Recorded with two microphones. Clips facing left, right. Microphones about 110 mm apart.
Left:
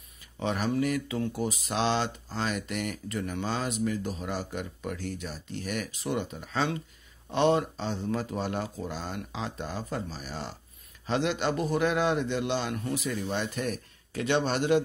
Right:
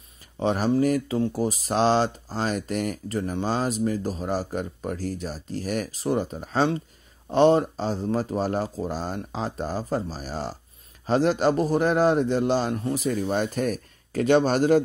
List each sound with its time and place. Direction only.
0.4 s speech: 35° right (ahead or behind)